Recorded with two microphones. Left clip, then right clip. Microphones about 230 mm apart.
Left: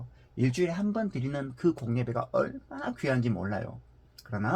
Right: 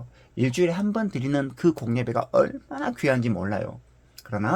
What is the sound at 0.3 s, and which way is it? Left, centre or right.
Speech, right.